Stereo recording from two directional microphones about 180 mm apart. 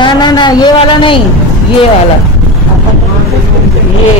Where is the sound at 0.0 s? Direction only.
25° left (ahead or behind).